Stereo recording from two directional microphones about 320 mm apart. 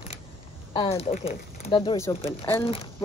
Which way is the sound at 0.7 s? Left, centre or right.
Centre.